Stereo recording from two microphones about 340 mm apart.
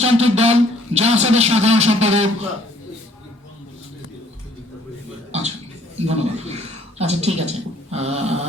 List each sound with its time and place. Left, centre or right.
0.0 s a man's voice: centre
6.1 s a man's voice: centre